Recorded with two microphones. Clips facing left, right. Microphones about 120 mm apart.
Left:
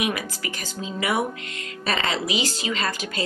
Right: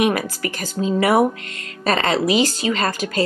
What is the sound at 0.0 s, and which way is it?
Speech, 40° right (ahead or behind).